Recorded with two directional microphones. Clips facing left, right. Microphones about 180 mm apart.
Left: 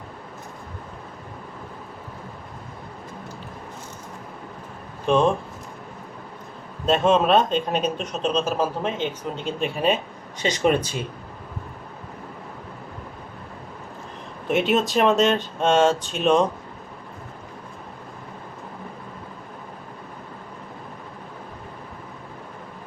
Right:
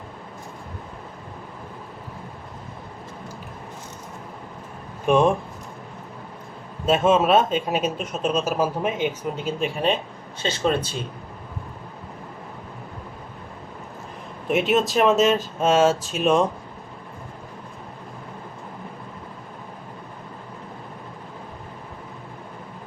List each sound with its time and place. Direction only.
5.0 s speech: 10° right (ahead or behind)
6.8 s speech: 5° right (ahead or behind)
10.4 s speech: 15° left (ahead or behind)
14.4 s speech: centre (ahead or behind)